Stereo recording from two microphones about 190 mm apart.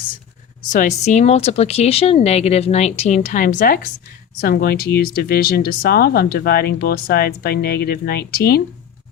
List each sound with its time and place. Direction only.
0.7 s speech: 40° left (ahead or behind)